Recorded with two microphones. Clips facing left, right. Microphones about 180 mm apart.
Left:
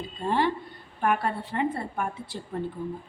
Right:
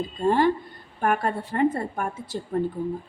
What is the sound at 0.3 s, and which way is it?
A woman's voice, 45° right (ahead or behind).